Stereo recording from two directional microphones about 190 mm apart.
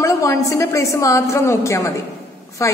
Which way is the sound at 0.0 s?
15° left (ahead or behind).